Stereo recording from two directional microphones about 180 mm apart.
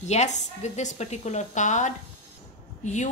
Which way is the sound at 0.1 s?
40° left (ahead or behind).